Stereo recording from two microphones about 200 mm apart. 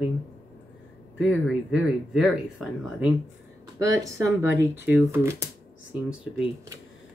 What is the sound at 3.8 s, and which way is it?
Speech, 15° right (ahead or behind).